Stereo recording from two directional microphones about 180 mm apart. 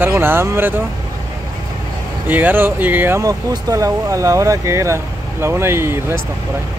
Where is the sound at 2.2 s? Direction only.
10° right (ahead or behind).